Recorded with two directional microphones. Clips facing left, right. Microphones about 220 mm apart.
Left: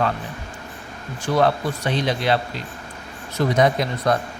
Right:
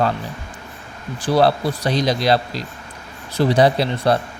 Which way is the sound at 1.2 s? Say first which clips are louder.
Right 3 dB; 35° right (ahead or behind).